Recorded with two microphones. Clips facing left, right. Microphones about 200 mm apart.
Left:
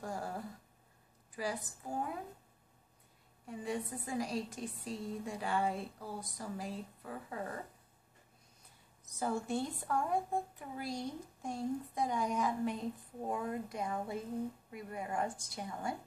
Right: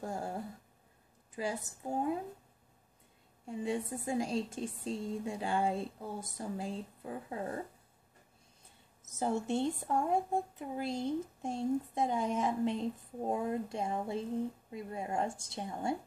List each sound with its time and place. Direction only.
0.0 s a sound: 25° right (ahead or behind)
1.3 s a woman's voice: 25° right (ahead or behind)
3.4 s a woman's voice: 25° right (ahead or behind)
8.6 s a woman's voice: 25° right (ahead or behind)